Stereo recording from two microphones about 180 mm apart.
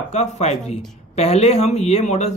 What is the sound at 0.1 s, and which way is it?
Speech, 40° left (ahead or behind).